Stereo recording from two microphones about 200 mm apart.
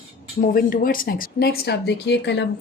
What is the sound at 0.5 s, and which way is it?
Speech, 45° left (ahead or behind).